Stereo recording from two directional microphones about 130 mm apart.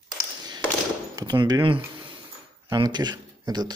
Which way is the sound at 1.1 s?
30° right (ahead or behind).